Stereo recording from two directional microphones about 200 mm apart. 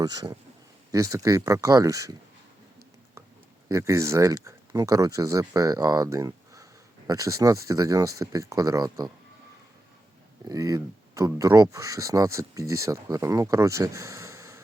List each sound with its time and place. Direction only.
0.0 s a man's voice: 20° right (ahead or behind)
3.7 s speech: 15° right (ahead or behind)
10.5 s speech: 15° right (ahead or behind)